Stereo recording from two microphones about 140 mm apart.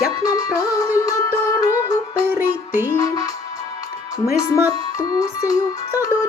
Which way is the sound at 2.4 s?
15° right (ahead or behind).